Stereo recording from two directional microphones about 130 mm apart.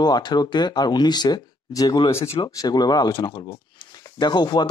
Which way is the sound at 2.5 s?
30° left (ahead or behind).